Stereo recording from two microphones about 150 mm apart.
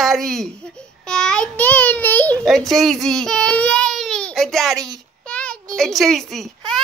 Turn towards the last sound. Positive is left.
turn(degrees=0)  # may be behind; listen again after turning